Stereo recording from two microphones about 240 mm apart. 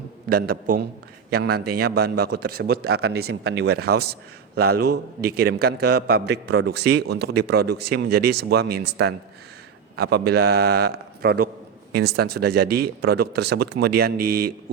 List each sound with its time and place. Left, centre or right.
0.3 s a man's voice: right